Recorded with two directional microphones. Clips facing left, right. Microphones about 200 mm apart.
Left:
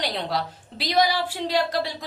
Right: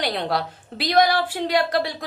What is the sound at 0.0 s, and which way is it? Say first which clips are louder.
A woman's voice: right 3 dB; 60° right (ahead or behind).